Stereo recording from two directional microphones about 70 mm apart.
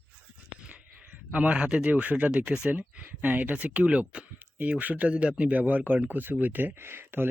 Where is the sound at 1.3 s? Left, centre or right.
Centre.